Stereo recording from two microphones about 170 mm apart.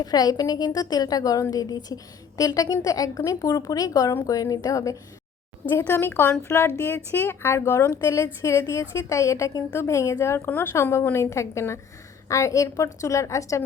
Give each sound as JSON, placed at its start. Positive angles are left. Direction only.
{"t": 0.0, "sound": "a woman's voice", "side_deg": 25}